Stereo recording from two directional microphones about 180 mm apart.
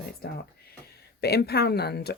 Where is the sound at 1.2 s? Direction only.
65° left (ahead or behind).